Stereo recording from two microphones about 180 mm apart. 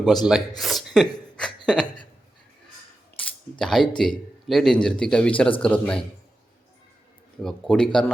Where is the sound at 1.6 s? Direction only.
5° left (ahead or behind).